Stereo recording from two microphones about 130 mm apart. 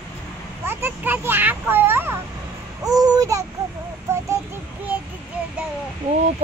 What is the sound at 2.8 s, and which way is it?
Babbling, 30° right (ahead or behind).